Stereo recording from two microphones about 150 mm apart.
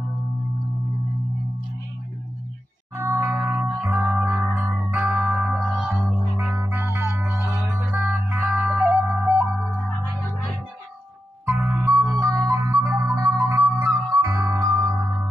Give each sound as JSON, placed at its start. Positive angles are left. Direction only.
{"t": 3.0, "sound": "music", "side_deg": -15}
{"t": 11.4, "sound": "music", "side_deg": -15}
{"t": 14.6, "sound": "singing bowl", "side_deg": -20}